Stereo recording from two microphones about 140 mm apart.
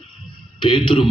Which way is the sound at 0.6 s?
40° left (ahead or behind).